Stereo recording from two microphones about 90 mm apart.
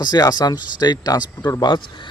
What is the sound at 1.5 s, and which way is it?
Speech, 60° left (ahead or behind).